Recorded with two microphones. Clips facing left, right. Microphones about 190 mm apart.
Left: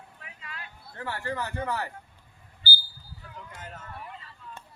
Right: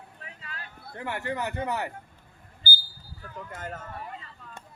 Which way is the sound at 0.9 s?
20° right (ahead or behind).